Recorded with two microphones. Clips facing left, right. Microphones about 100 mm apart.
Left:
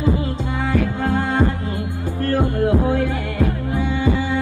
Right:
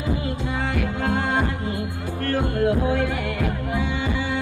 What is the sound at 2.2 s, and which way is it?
Music, 25° left (ahead or behind).